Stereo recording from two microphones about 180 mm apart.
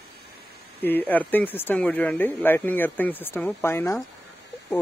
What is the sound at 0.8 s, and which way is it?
Speech, 10° left (ahead or behind).